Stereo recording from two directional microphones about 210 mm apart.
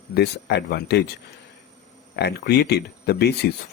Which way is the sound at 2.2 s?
50° left (ahead or behind).